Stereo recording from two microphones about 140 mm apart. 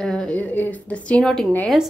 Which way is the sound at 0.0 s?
5° left (ahead or behind).